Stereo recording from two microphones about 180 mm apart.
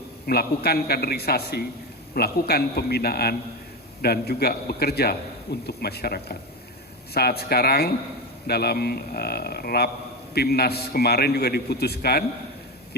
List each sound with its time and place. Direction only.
0.3 s a man's voice: 60° left (ahead or behind)